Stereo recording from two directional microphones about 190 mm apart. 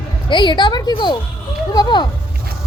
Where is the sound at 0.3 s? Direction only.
25° left (ahead or behind).